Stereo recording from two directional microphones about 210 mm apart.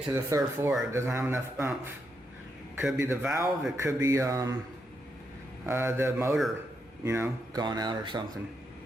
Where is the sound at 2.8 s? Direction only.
10° right (ahead or behind).